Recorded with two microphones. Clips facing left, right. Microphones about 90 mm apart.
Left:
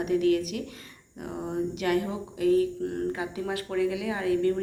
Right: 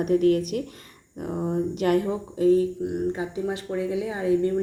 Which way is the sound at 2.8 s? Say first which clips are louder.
Right 3 dB; 15° right (ahead or behind).